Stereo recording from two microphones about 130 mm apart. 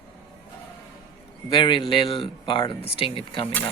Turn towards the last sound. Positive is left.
turn(degrees=45)  # may be behind; listen again after turning